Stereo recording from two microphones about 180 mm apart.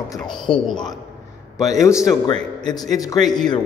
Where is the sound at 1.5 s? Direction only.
20° left (ahead or behind).